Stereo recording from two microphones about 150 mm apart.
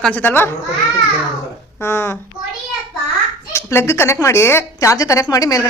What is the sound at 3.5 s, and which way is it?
A woman's voice, 15° left (ahead or behind).